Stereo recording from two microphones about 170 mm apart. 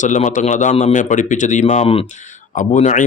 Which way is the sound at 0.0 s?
45° left (ahead or behind).